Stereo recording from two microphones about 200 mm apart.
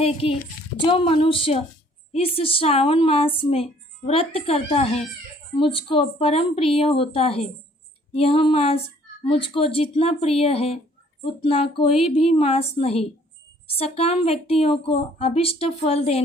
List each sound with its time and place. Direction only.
0.0 s a woman's voice: 30° left (ahead or behind)